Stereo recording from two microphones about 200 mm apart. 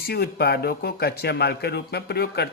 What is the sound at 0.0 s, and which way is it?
Speech, 55° left (ahead or behind).